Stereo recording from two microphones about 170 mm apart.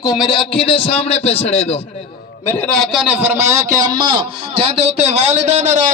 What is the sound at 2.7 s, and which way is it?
A man's voice, centre (ahead or behind).